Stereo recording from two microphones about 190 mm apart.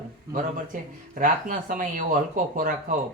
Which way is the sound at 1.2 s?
45° right (ahead or behind).